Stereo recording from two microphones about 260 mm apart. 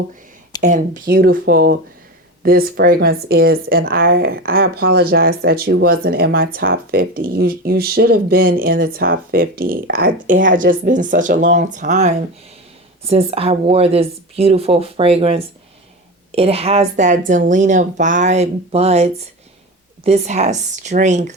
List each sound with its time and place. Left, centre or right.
0.6 s a woman's voice: right